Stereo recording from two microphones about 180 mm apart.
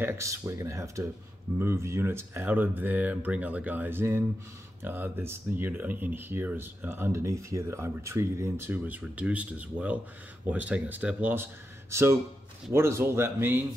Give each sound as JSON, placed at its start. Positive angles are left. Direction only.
{"t": 0.0, "sound": "speech", "side_deg": -15}